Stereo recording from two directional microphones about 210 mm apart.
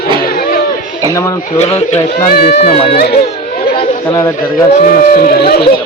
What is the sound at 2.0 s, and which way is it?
Speech, 50° left (ahead or behind).